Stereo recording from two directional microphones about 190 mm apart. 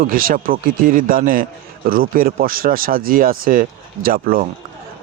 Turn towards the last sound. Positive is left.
turn(degrees=-50)  # may be behind; listen again after turning